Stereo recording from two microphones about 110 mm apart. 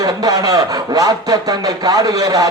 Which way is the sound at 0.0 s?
35° right (ahead or behind).